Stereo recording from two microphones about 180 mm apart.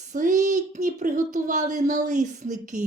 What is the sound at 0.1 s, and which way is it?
A child's voice, 45° right (ahead or behind).